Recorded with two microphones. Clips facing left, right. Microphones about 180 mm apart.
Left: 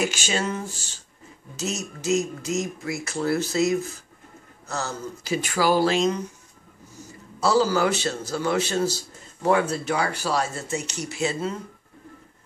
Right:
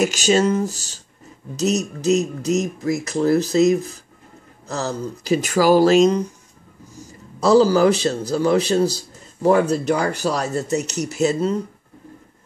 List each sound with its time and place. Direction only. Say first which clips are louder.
0.0 s a man's voice: right 9 dB; 40° right (ahead or behind)
7.3 s a man's voice: right 7 dB; 40° right (ahead or behind)